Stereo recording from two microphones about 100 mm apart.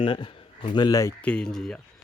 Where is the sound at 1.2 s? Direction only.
10° left (ahead or behind).